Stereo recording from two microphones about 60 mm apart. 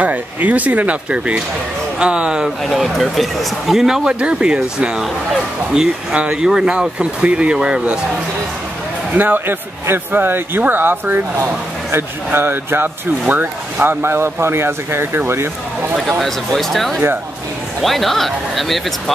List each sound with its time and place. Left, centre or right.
0.0 s speech: right
2.6 s speech: centre
9.1 s speech: right
16.0 s speech: centre